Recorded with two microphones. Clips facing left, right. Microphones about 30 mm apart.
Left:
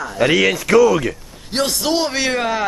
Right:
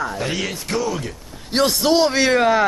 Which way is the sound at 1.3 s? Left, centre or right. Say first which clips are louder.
Right 5 dB; centre.